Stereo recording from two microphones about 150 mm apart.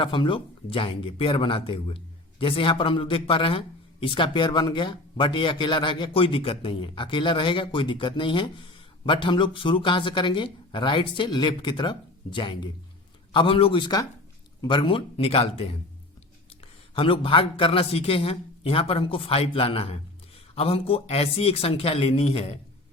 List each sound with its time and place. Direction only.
0.0 s a man's voice: 35° left (ahead or behind)
16.9 s a man's voice: 35° left (ahead or behind)